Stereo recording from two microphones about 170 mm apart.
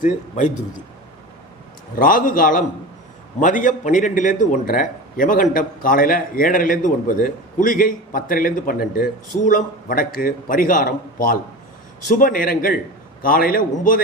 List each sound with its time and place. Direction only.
0.0 s a man's voice: 45° left (ahead or behind)
2.0 s a man's voice: 55° left (ahead or behind)